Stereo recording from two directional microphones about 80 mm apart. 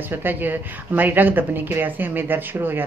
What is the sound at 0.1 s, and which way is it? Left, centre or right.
Speech, right.